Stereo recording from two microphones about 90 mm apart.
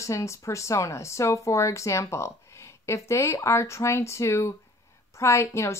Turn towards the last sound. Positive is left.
turn(degrees=30)  # may be behind; listen again after turning